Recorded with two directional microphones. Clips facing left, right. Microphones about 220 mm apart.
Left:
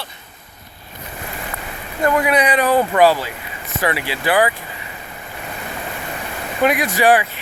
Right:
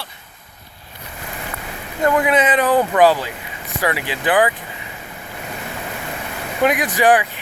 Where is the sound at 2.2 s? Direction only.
20° right (ahead or behind).